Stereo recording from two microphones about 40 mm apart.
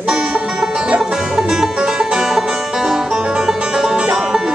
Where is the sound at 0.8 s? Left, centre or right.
Centre.